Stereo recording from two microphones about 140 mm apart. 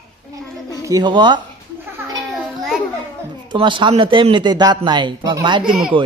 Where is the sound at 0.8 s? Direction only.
30° right (ahead or behind).